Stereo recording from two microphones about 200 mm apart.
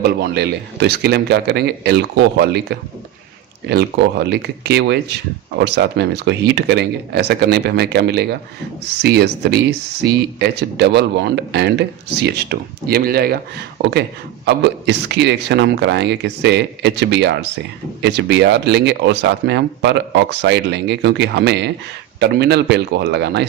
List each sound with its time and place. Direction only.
0.0 s speech: 55° right (ahead or behind)